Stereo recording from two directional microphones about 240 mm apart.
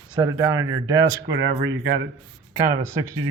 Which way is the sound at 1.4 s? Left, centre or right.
Right.